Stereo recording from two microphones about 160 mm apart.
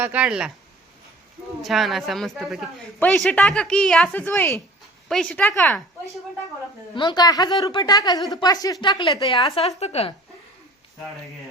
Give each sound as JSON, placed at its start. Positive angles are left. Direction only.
{"t": 0.0, "sound": "speech", "side_deg": -10}
{"t": 1.6, "sound": "a woman's voice", "side_deg": 0}
{"t": 5.0, "sound": "a woman's voice", "side_deg": 5}
{"t": 6.9, "sound": "a woman's voice", "side_deg": 25}
{"t": 9.6, "sound": "a woman's voice", "side_deg": 40}